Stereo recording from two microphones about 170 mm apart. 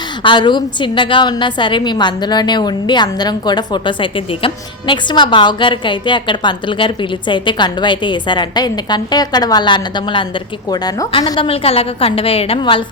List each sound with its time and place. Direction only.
0.2 s a woman's voice: 25° left (ahead or behind)